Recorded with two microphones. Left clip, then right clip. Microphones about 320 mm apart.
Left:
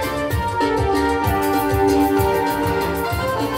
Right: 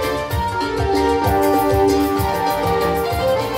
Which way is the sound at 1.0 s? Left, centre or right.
Centre.